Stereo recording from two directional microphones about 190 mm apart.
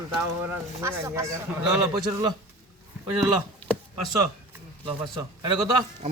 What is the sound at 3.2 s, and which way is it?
Speech, 5° left (ahead or behind).